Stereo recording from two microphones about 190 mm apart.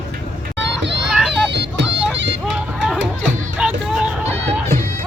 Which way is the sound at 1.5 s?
65° right (ahead or behind).